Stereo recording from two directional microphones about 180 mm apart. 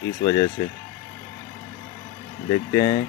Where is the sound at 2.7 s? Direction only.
20° left (ahead or behind).